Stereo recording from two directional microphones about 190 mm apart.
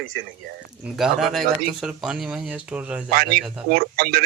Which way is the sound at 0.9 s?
Centre (ahead or behind).